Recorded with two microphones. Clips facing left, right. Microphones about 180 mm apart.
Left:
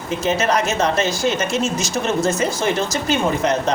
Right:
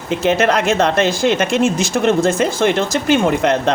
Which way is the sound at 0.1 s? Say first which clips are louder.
Right 4 dB; 60° right (ahead or behind).